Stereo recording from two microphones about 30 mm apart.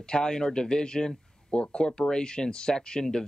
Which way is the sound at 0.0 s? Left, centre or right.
Left.